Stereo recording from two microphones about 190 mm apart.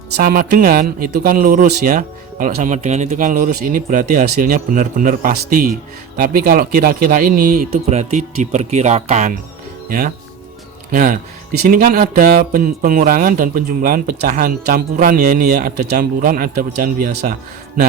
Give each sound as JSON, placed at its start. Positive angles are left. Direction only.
{"t": 0.2, "sound": "speech", "side_deg": -50}
{"t": 7.7, "sound": "speech", "side_deg": -35}
{"t": 10.9, "sound": "speech", "side_deg": -45}